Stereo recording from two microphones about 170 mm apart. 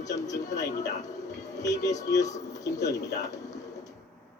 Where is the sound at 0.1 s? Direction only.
20° left (ahead or behind).